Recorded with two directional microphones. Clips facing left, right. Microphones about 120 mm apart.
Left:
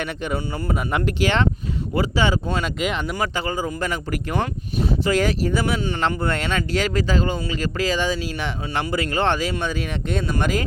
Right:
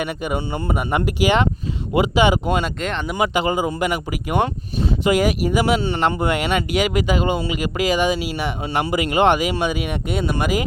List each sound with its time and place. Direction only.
0.0 s speech: 10° right (ahead or behind)
0.3 s speech: 25° right (ahead or behind)
0.7 s speech: 5° right (ahead or behind)
2.8 s speech: 5° left (ahead or behind)
3.2 s speech: 15° right (ahead or behind)